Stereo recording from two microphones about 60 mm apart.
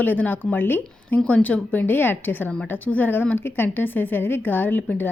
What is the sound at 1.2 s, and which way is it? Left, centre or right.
Speech, left.